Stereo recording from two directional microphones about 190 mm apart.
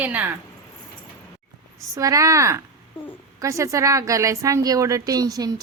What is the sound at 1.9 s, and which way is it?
A woman's voice, 15° right (ahead or behind).